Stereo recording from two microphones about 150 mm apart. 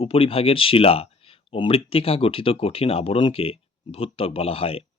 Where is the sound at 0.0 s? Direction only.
40° left (ahead or behind).